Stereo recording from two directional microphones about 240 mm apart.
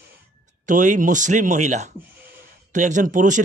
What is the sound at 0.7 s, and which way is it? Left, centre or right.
A man's voice, right.